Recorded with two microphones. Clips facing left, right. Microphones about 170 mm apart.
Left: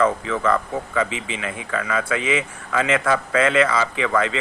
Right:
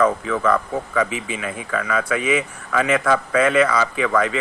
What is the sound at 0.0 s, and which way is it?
Speech, 25° left (ahead or behind).